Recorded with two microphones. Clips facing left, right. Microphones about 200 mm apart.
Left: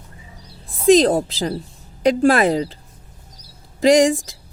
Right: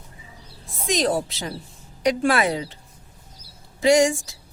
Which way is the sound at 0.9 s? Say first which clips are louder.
Left 10 dB; 35° left (ahead or behind).